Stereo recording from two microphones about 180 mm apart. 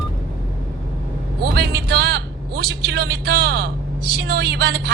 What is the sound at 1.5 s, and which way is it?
Vehicle, 65° right (ahead or behind).